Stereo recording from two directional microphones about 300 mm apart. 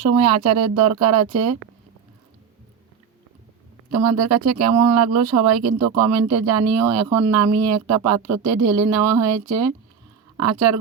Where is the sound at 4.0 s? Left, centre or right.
Right.